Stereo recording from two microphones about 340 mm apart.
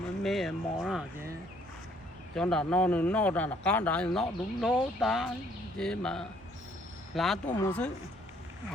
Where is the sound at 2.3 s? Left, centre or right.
Centre.